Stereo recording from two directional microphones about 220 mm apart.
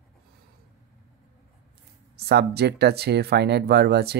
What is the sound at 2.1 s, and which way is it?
Speech, 50° right (ahead or behind).